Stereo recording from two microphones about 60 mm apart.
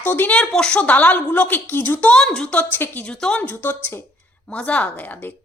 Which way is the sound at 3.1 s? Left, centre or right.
Centre.